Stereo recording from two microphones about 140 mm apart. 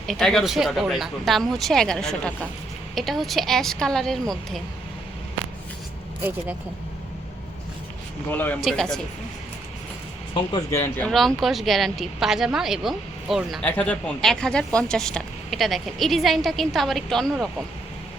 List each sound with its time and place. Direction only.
0.1 s speech: 5° left (ahead or behind)
8.3 s speech: 10° left (ahead or behind)
10.7 s speech: 15° left (ahead or behind)
11.1 s speech: centre (ahead or behind)
13.7 s speech: 10° left (ahead or behind)